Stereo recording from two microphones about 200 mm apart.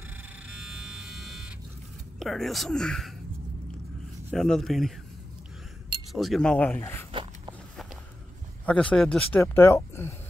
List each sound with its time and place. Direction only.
0.5 s electric shaver: 5° right (ahead or behind)
2.1 s speech: centre (ahead or behind)
4.3 s speech: centre (ahead or behind)
6.1 s speech: centre (ahead or behind)
7.1 s a sound: 25° right (ahead or behind)
8.6 s speech: 5° left (ahead or behind)